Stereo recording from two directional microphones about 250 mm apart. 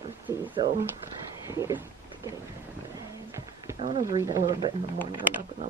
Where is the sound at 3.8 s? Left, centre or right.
Centre.